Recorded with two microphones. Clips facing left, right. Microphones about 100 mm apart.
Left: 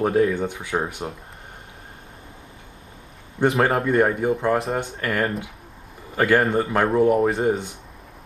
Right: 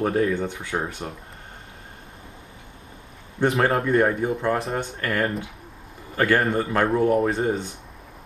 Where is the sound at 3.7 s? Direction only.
Centre (ahead or behind).